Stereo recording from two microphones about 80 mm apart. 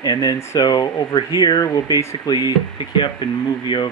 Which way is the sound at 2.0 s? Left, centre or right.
Left.